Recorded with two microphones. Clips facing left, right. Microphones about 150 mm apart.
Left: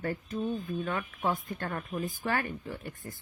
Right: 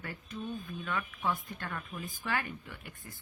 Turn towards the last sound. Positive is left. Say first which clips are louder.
# left 8 dB
turn(degrees=45)  # may be behind; listen again after turning